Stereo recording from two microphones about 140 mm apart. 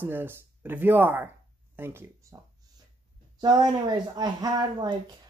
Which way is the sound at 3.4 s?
30° right (ahead or behind).